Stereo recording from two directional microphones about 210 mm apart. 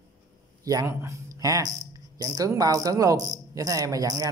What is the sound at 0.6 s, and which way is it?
Speech, 15° right (ahead or behind).